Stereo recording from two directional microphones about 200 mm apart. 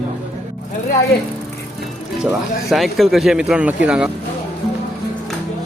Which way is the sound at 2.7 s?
Centre (ahead or behind).